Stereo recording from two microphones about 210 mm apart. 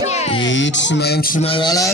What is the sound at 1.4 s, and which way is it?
Speech, 25° left (ahead or behind).